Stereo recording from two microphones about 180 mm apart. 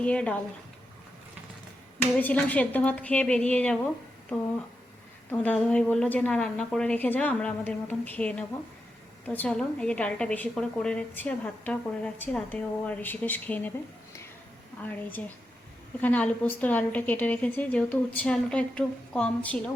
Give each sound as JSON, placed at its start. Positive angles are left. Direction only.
{"t": 0.0, "sound": "a woman's voice", "side_deg": 5}
{"t": 2.1, "sound": "a woman's voice", "side_deg": 10}
{"t": 5.3, "sound": "a woman's voice", "side_deg": 10}
{"t": 16.0, "sound": "a woman's voice", "side_deg": 10}